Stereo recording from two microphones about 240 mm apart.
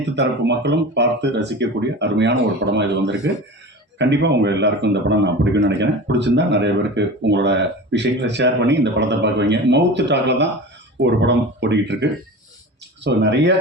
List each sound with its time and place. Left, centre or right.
0.2 s a man's voice: right
13.1 s a man's voice: right